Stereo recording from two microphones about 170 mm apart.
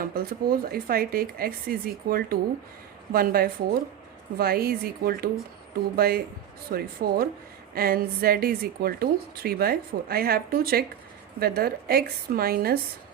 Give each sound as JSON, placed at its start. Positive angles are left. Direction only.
{"t": 0.0, "sound": "a woman's voice", "side_deg": -60}